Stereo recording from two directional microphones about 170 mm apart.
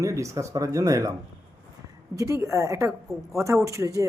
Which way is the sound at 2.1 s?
15° right (ahead or behind).